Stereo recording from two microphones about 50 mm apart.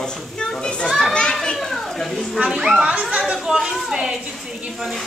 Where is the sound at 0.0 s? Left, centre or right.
Centre.